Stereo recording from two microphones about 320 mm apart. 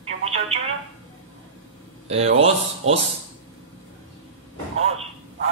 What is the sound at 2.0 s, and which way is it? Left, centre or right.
Speech, centre.